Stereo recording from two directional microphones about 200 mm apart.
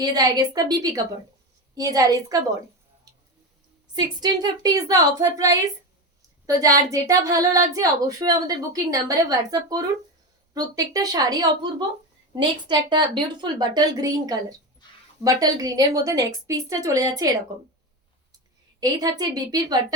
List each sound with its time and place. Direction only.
0.0 s a woman's voice: 20° right (ahead or behind)
3.9 s a woman's voice: 20° right (ahead or behind)
18.8 s a woman's voice: 20° right (ahead or behind)